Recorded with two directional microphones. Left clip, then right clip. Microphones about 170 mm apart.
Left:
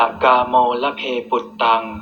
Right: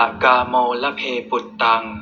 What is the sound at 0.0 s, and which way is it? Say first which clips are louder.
Speech: left 1 dB; 40° left (ahead or behind).